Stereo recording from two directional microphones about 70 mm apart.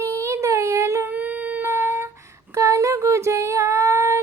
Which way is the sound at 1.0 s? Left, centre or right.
Right.